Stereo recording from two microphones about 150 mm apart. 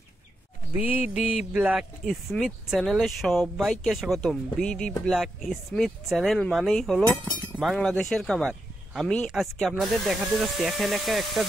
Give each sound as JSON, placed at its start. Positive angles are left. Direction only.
{"t": 0.7, "sound": "speech", "side_deg": -10}
{"t": 8.5, "sound": "a sound", "side_deg": 0}
{"t": 9.3, "sound": "speech", "side_deg": 0}